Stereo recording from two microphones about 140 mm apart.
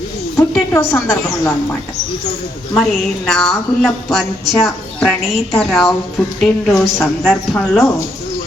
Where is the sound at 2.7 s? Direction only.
5° left (ahead or behind).